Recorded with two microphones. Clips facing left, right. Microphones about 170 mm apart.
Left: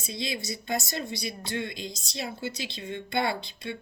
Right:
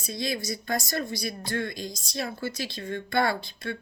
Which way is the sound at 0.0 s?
25° left (ahead or behind).